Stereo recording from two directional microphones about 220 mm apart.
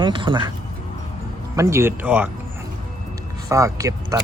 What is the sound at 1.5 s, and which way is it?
Speech, 15° right (ahead or behind).